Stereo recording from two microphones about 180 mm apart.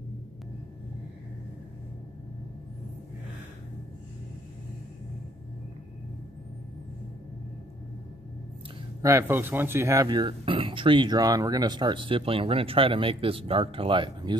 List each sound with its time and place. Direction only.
9.0 s speech: 15° right (ahead or behind)